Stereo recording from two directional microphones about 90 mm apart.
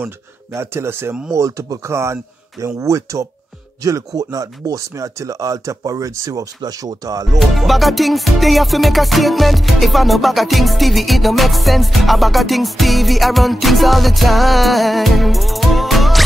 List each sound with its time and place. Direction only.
0.0 s speech: 30° right (ahead or behind)
7.3 s music: centre (ahead or behind)